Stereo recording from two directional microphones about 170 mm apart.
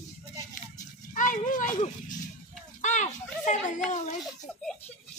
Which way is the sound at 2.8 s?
45° left (ahead or behind).